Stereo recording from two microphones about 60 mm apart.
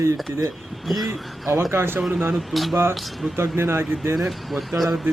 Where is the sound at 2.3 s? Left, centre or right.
Centre.